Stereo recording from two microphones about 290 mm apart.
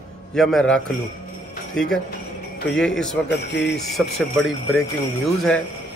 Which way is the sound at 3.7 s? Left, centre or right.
Centre.